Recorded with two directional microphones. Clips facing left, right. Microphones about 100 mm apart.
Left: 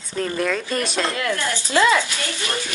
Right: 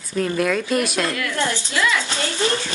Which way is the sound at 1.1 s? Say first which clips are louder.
Even; 25° left (ahead or behind).